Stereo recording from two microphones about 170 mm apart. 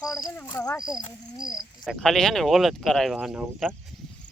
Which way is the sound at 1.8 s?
Centre (ahead or behind).